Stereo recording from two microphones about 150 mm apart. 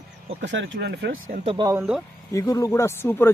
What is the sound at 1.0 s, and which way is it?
Speech, 80° right.